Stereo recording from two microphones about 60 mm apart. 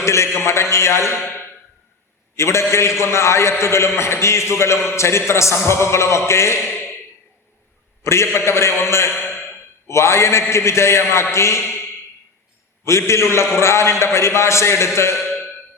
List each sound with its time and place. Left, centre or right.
0.0 s a man's voice: left
1.2 s a sound: left
2.3 s a man's voice: left
6.7 s a sound: left
8.0 s a man's voice: left
12.8 s a man's voice: left